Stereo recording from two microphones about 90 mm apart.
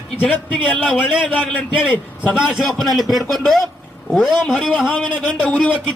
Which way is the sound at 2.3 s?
5° right (ahead or behind).